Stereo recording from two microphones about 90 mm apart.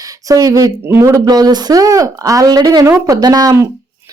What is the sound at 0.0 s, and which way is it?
A man's voice, 40° right (ahead or behind).